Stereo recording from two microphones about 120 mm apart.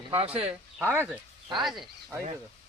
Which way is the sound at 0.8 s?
20° right (ahead or behind).